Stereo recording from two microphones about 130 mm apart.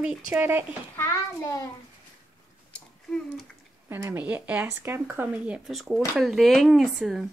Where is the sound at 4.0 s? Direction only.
15° right (ahead or behind).